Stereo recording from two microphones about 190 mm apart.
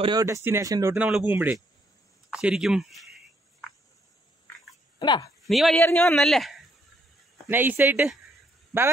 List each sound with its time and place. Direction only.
0.0 s a man's voice: 20° right (ahead or behind); by 3.1 s centre (ahead or behind)
4.9 s speech: 25° left (ahead or behind)
5.4 s a man's voice: centre (ahead or behind)
7.4 s speech: 10° right (ahead or behind)